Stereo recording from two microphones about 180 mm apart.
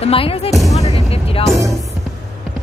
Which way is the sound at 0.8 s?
35° left (ahead or behind).